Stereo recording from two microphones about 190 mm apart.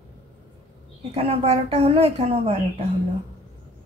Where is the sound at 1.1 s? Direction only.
30° right (ahead or behind).